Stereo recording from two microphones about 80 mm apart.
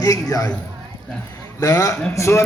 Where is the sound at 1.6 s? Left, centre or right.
Left.